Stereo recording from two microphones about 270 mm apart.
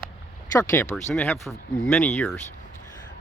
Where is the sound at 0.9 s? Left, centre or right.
Centre.